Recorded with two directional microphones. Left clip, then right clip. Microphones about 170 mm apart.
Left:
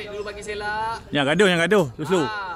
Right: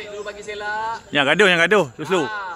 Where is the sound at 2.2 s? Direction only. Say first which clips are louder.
Right 1 dB; 5° right (ahead or behind).